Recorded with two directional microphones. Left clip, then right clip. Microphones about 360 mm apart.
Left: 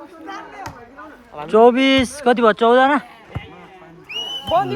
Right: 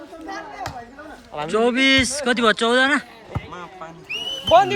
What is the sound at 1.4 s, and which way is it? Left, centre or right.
Speech, centre.